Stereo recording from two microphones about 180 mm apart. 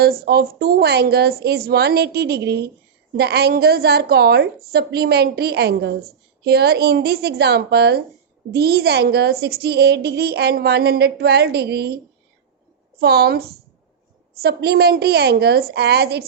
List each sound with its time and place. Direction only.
0.0 s speech: 60° right (ahead or behind)
13.0 s speech: 60° right (ahead or behind)